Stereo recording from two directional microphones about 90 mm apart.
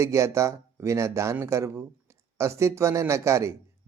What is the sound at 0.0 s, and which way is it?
Speech, 30° right (ahead or behind).